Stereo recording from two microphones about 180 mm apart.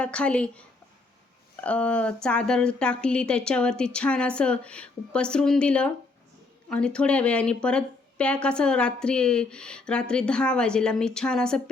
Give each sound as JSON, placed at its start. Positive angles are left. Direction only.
{"t": 0.0, "sound": "speech", "side_deg": 5}
{"t": 1.6, "sound": "a woman's voice", "side_deg": 5}